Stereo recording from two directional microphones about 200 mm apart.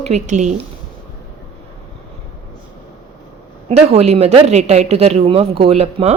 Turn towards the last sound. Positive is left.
turn(degrees=-30)  # may be behind; listen again after turning